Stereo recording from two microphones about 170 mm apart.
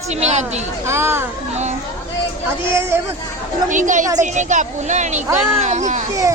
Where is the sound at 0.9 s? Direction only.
15° right (ahead or behind).